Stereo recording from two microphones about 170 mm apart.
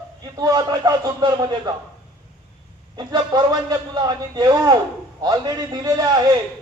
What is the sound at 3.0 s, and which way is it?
A man's voice, 25° right (ahead or behind).